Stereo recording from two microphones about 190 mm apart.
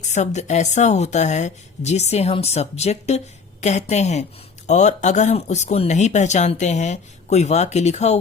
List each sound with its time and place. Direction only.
0.0 s speech: 40° left (ahead or behind)